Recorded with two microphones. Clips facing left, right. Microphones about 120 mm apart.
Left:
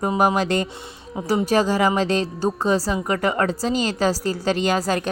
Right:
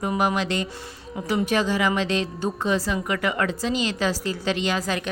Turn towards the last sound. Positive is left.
turn(degrees=40)  # may be behind; listen again after turning